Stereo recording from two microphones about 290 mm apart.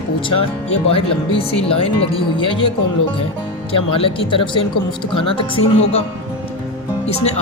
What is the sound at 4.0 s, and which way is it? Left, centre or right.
Speech, centre.